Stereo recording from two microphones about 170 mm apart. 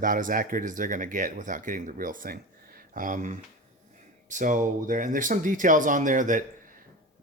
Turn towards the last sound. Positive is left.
turn(degrees=-50)  # may be behind; listen again after turning